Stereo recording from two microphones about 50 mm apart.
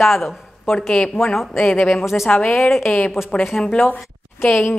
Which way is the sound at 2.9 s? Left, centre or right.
Left.